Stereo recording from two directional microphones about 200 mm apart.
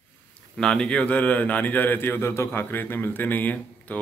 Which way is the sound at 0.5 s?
5° left (ahead or behind).